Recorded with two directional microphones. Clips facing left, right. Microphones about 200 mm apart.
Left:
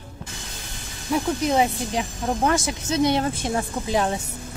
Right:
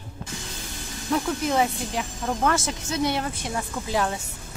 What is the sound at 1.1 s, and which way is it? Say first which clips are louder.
Speech: left 3 dB; 20° left (ahead or behind).